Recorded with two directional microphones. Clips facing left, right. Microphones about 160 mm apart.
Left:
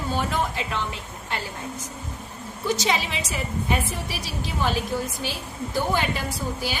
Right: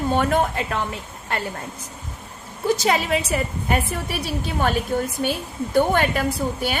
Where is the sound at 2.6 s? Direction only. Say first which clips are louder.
Right 5 dB; 55° right (ahead or behind).